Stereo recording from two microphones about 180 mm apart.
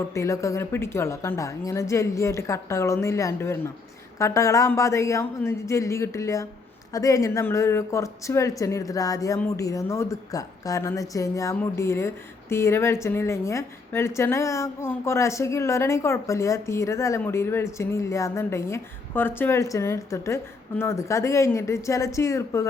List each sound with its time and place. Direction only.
0.1 s speech: 15° left (ahead or behind)